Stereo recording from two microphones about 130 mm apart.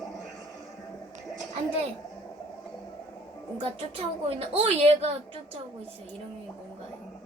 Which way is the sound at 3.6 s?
50° right (ahead or behind).